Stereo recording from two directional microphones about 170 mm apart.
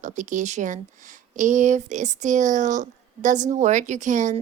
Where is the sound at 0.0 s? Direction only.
45° right (ahead or behind).